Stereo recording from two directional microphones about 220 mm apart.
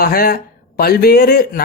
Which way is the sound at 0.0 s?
40° left (ahead or behind).